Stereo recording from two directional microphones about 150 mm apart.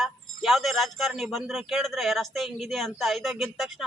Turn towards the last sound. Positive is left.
turn(degrees=0)  # may be behind; listen again after turning